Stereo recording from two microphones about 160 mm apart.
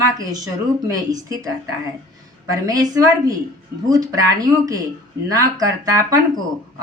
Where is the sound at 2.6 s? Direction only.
20° right (ahead or behind).